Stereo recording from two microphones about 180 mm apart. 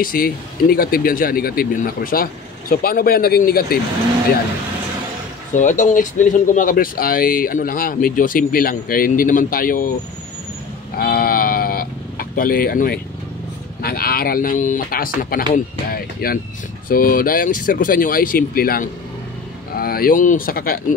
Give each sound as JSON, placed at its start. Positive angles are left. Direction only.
{"t": 0.0, "sound": "speech", "side_deg": 55}
{"t": 5.5, "sound": "speech", "side_deg": 45}
{"t": 11.0, "sound": "sheep", "side_deg": 55}
{"t": 13.8, "sound": "speech", "side_deg": 55}